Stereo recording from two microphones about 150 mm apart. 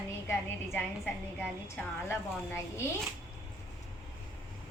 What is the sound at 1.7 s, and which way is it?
A woman's voice, 15° left (ahead or behind).